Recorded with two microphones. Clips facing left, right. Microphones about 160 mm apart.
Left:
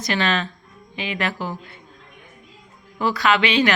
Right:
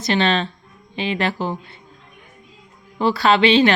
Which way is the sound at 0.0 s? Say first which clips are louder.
Right 4 dB; 30° right (ahead or behind).